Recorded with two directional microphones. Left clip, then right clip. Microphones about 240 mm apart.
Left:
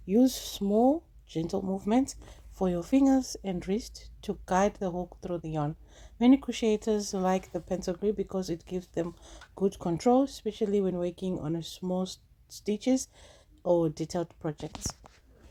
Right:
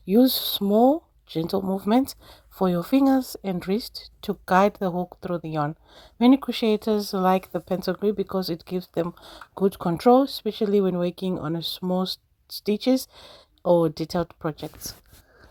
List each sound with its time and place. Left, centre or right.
0.0 s speech: right